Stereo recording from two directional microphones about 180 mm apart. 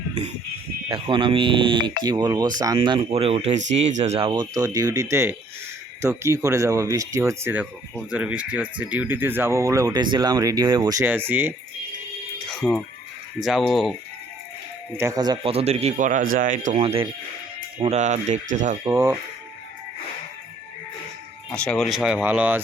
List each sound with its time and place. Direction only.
0.9 s speech: 30° right (ahead or behind); by 11.5 s 10° right (ahead or behind)
13.4 s speech: centre (ahead or behind)
14.9 s speech: 15° right (ahead or behind); by 18.8 s 45° right (ahead or behind)
18.9 s speech: 15° right (ahead or behind)
21.5 s speech: 5° left (ahead or behind)